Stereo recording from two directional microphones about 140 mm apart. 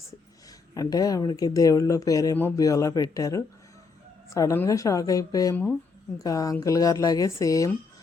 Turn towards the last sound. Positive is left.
turn(degrees=25)  # may be behind; listen again after turning